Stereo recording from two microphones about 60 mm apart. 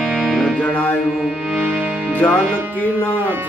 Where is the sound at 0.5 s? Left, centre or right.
Left.